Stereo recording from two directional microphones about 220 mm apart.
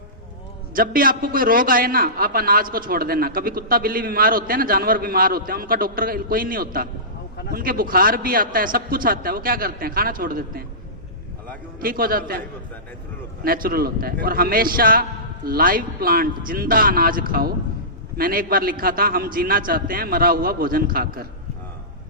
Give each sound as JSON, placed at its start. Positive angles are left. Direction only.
{"t": 0.7, "sound": "a man's voice", "side_deg": -40}
{"t": 11.8, "sound": "a man's voice", "side_deg": -40}
{"t": 13.4, "sound": "a man's voice", "side_deg": -40}